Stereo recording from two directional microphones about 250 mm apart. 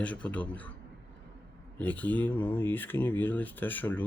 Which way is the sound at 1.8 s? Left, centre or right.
Centre.